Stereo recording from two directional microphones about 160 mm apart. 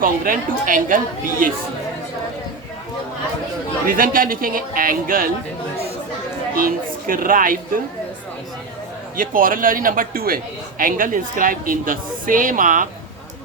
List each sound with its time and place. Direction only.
0.0 s a man's voice: 60° right (ahead or behind)
3.8 s a man's voice: 60° right (ahead or behind)
6.6 s a man's voice: 65° right (ahead or behind)
9.1 s a man's voice: 60° right (ahead or behind)